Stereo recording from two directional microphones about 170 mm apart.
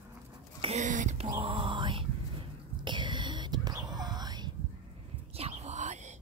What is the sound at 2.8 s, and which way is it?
Whispering, 25° right (ahead or behind).